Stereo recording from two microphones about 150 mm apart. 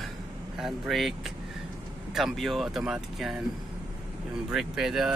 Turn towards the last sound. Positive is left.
turn(degrees=0)  # may be behind; listen again after turning